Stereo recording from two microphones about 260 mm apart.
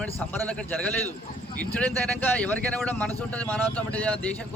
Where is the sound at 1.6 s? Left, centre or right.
Centre.